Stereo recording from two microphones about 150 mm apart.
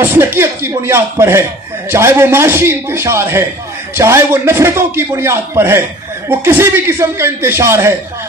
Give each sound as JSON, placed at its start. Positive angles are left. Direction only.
{"t": 0.0, "sound": "a man's voice", "side_deg": -15}